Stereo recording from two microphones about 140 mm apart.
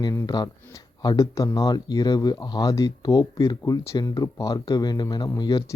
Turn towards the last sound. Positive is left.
turn(degrees=30)  # may be behind; listen again after turning